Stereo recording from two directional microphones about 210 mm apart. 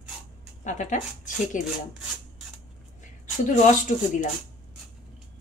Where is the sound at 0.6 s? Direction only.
35° left (ahead or behind).